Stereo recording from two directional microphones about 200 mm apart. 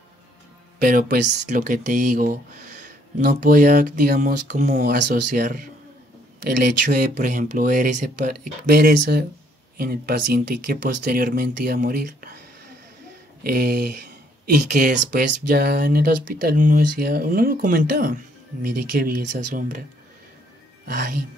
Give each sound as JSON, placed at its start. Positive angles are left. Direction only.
{"t": 0.7, "sound": "speech", "side_deg": -45}
{"t": 13.4, "sound": "speech", "side_deg": -50}
{"t": 20.8, "sound": "speech", "side_deg": -45}